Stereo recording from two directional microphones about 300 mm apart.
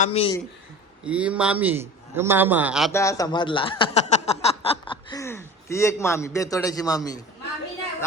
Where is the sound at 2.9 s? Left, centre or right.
Centre.